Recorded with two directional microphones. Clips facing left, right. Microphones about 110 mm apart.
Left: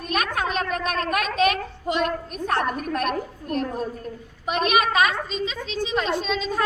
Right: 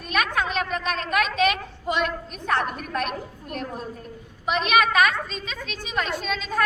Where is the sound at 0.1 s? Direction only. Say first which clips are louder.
Even; 40° left (ahead or behind).